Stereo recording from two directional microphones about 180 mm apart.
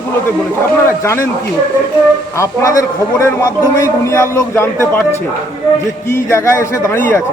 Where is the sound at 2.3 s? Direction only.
15° left (ahead or behind).